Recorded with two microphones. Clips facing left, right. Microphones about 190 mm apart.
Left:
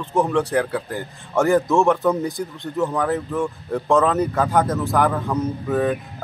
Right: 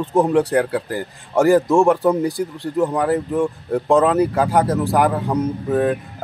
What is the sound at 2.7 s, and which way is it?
Speech, 15° right (ahead or behind).